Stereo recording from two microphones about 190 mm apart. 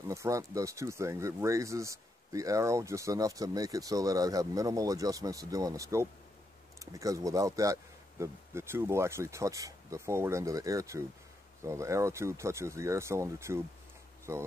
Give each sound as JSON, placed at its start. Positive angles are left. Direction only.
{"t": 0.1, "sound": "speech", "side_deg": -15}